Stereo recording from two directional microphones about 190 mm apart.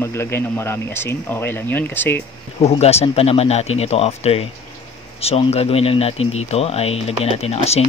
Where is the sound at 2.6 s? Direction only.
30° left (ahead or behind).